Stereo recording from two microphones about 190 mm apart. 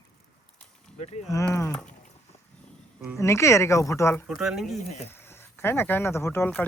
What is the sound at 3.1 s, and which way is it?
Speech, 15° left (ahead or behind).